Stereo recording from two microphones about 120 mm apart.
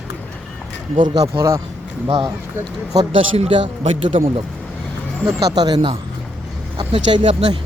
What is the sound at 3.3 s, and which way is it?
Speech, 55° right (ahead or behind).